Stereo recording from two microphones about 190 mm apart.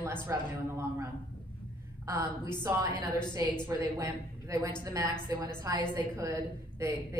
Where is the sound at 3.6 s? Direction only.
15° right (ahead or behind).